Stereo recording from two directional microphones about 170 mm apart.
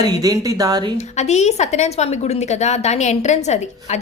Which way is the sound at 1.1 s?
40° left (ahead or behind).